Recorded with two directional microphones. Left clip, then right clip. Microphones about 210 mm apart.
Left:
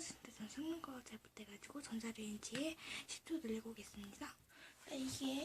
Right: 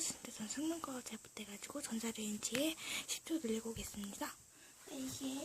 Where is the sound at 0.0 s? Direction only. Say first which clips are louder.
Right 7 dB; 45° right (ahead or behind).